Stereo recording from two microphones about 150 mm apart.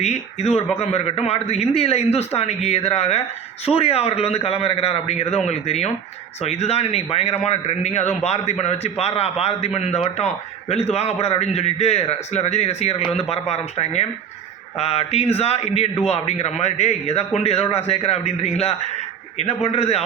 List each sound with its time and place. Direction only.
0.0 s a man's voice: 45° left (ahead or behind)